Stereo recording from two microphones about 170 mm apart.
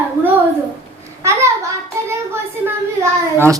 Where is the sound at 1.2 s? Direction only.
15° right (ahead or behind).